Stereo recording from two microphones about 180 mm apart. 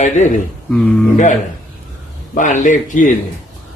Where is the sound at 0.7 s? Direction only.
5° left (ahead or behind).